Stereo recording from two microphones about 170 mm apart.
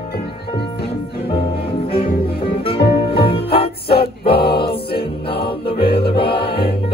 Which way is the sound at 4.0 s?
65° left (ahead or behind).